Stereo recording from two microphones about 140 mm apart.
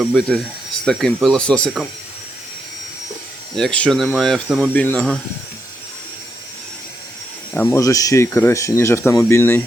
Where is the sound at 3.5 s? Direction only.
5° left (ahead or behind).